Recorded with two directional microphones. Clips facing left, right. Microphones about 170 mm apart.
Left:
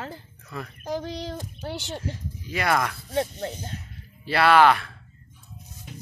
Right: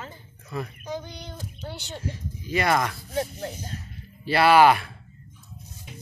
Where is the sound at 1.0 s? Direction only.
90° left.